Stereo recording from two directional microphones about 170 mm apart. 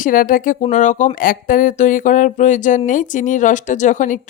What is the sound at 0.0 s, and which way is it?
Speech, 55° left (ahead or behind).